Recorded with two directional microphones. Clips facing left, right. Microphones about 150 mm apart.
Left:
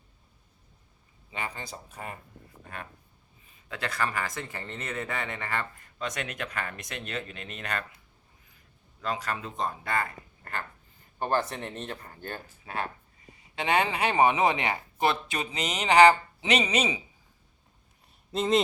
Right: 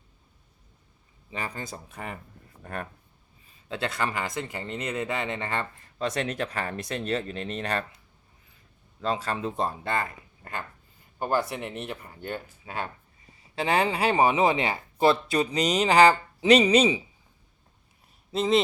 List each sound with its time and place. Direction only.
3.7 s speech: 25° right (ahead or behind)
9.0 s speech: 30° right (ahead or behind)
11.2 s speech: 10° right (ahead or behind)
13.6 s speech: 30° right (ahead or behind)
18.3 s speech: centre (ahead or behind)